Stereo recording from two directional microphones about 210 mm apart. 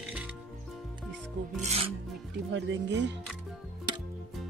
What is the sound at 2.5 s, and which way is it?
Speech, 55° right (ahead or behind).